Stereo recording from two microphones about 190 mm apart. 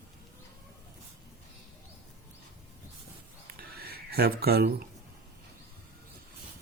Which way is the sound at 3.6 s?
50° right (ahead or behind).